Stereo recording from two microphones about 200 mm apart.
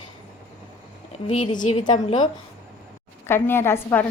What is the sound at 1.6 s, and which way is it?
Speech, 40° left (ahead or behind).